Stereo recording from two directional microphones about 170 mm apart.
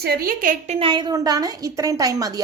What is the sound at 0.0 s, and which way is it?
Speech, 65° right (ahead or behind).